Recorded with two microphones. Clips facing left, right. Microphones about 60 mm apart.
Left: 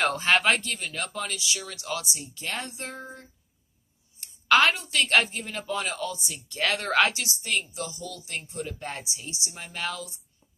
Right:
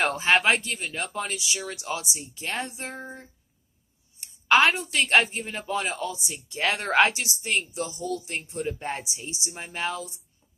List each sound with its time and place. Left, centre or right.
0.2 s a man's voice: centre; by 3.2 s right
4.2 s a woman's voice: centre